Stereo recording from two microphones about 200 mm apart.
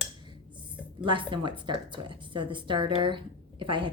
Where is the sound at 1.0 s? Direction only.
25° right (ahead or behind).